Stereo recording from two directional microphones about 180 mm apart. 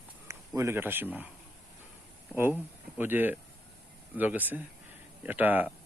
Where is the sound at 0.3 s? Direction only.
15° right (ahead or behind).